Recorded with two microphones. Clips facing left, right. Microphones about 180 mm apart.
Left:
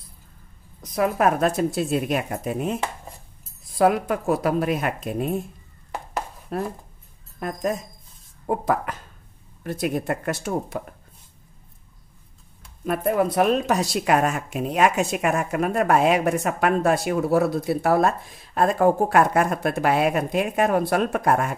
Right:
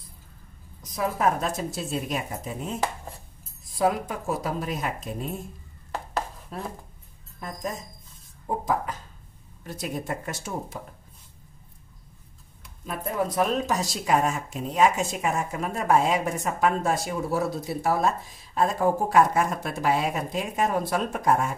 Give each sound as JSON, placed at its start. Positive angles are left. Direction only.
{"t": 0.9, "sound": "speech", "side_deg": 65}
{"t": 6.5, "sound": "a woman's voice", "side_deg": 65}
{"t": 12.8, "sound": "speech", "side_deg": 65}